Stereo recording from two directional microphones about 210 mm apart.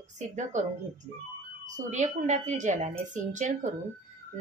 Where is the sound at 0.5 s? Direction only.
35° right (ahead or behind).